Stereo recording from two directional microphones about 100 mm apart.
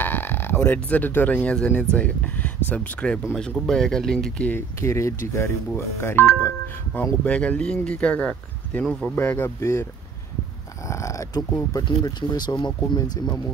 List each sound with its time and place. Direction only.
0.0 s a sound: 20° left (ahead or behind)
0.7 s speech: 15° left (ahead or behind)
4.5 s speech: 25° left (ahead or behind)
10.9 s speech: 30° left (ahead or behind)
12.2 s speech: 45° left (ahead or behind)